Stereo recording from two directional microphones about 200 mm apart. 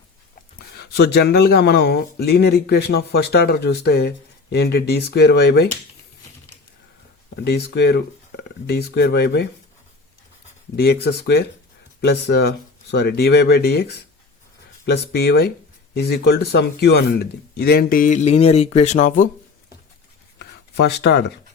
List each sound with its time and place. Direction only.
0.8 s speech: 55° left (ahead or behind)
7.4 s speech: 55° left (ahead or behind)
10.8 s speech: 55° left (ahead or behind)
20.4 s a sound: 55° left (ahead or behind)